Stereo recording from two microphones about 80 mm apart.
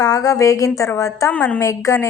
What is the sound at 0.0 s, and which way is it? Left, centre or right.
A woman's voice, left.